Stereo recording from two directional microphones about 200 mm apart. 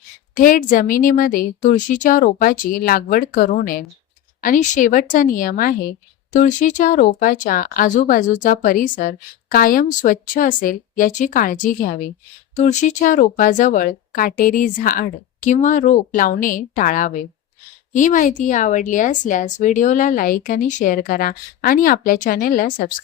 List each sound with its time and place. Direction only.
0.3 s speech: 45° left (ahead or behind)